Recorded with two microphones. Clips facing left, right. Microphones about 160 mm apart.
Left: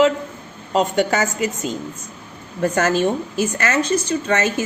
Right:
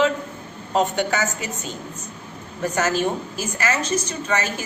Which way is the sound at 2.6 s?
55° left (ahead or behind).